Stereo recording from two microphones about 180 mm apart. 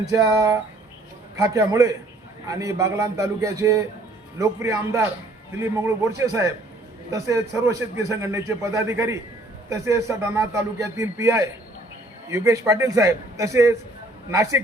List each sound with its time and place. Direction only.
0.0 s a man's voice: 20° right (ahead or behind)